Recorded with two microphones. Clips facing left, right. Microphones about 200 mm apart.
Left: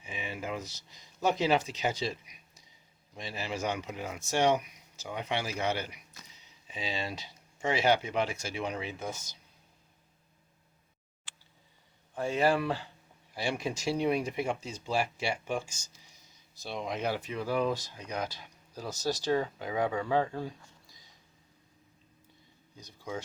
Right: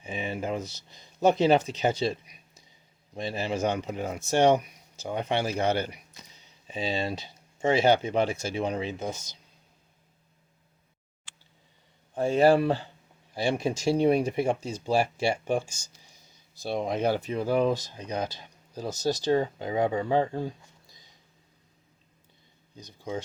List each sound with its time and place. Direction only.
0.0 s a sound: 30° right (ahead or behind)
0.4 s speech: 30° right (ahead or behind)
12.1 s speech: 30° right (ahead or behind)